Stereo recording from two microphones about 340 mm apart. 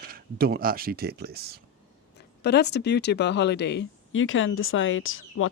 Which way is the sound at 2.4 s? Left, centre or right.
Left.